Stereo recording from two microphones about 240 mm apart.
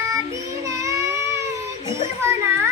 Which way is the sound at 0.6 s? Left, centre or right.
Centre.